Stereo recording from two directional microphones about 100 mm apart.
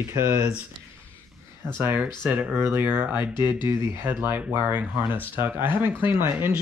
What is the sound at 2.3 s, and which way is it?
Speech, 10° right (ahead or behind).